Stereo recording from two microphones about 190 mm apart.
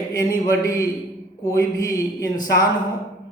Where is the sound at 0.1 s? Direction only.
20° left (ahead or behind).